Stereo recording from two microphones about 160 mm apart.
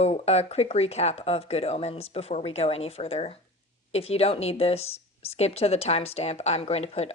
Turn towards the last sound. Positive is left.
turn(degrees=40)  # may be behind; listen again after turning